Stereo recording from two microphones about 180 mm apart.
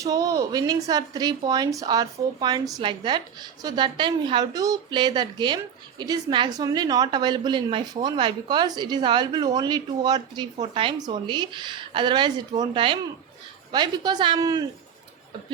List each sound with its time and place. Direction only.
0.0 s speech: 20° right (ahead or behind)